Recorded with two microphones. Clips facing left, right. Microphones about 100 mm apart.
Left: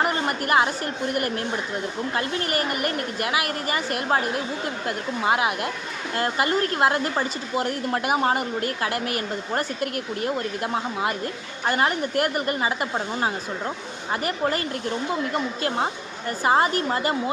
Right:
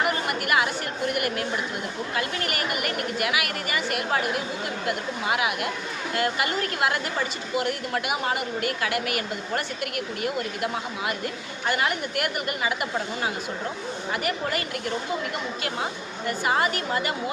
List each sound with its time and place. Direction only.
0.0 s a woman's voice: 35° left (ahead or behind)